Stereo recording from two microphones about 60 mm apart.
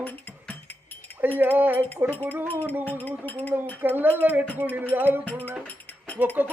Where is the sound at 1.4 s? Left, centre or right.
Right.